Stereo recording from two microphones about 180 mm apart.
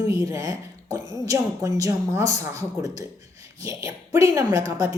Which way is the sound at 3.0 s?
20° right (ahead or behind).